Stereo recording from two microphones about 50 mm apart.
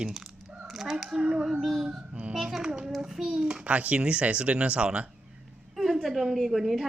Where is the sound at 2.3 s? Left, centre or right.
Centre.